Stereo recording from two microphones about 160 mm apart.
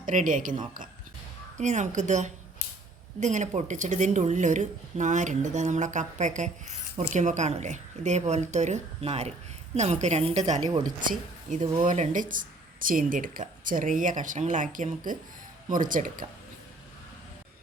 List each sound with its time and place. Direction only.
0.0 s speech: 55° right (ahead or behind)
10.6 s speech: 25° right (ahead or behind)
11.8 s speech: 55° right (ahead or behind)